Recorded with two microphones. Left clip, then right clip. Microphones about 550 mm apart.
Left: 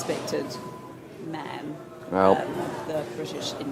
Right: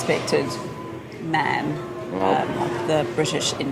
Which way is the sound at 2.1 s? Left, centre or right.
Left.